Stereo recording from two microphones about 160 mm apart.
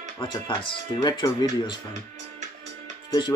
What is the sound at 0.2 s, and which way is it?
Speech, 30° left (ahead or behind).